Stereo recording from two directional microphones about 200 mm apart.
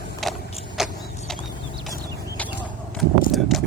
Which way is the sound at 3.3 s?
Centre (ahead or behind).